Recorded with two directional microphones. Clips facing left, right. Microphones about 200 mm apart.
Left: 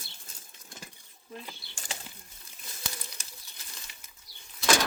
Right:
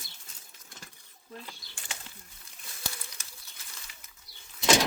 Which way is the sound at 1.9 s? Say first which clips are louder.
Left 3 dB; 35° left (ahead or behind).